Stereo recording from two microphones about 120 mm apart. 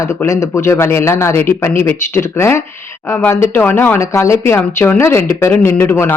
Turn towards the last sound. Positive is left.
turn(degrees=15)  # may be behind; listen again after turning